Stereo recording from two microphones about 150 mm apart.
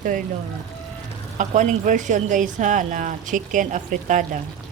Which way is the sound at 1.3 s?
55° right (ahead or behind).